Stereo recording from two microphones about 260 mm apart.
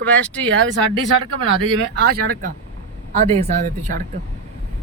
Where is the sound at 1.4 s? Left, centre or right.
Right.